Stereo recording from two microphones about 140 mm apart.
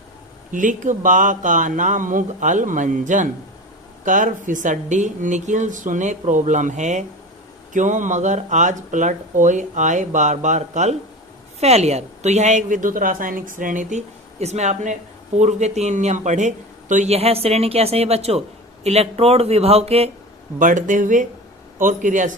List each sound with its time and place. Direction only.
0.5 s a woman's voice: 65° right (ahead or behind); by 20.1 s 45° right (ahead or behind)
20.6 s a woman's voice: 65° right (ahead or behind)